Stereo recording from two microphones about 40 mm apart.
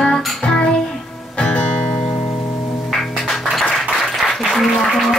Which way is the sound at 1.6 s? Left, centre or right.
Left.